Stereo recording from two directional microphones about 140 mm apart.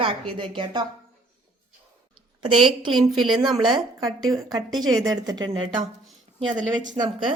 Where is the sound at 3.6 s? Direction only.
30° right (ahead or behind).